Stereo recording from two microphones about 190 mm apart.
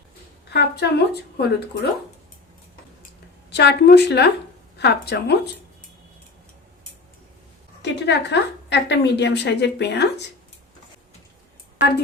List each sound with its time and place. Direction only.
0.5 s a woman's voice: 60° left (ahead or behind)
3.5 s a woman's voice: 60° left (ahead or behind)
7.8 s a woman's voice: 65° left (ahead or behind)